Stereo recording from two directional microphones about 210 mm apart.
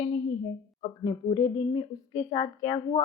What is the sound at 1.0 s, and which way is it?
A woman's voice, 20° left (ahead or behind).